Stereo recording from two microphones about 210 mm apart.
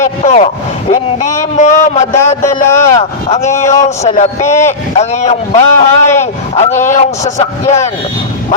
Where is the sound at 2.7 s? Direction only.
15° left (ahead or behind).